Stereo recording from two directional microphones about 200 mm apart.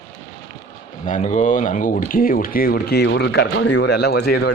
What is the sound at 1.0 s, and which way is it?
A man's voice, 35° left (ahead or behind).